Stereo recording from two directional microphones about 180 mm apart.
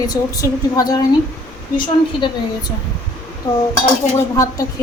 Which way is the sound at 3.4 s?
20° left (ahead or behind).